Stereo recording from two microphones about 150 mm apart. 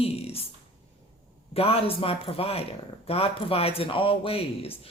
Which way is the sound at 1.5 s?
40° left (ahead or behind).